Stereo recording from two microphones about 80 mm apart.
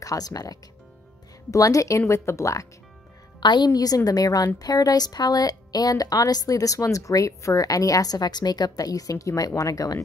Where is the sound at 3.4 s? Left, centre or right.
Left.